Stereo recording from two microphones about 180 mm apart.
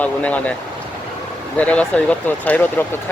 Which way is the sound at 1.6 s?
5° left (ahead or behind).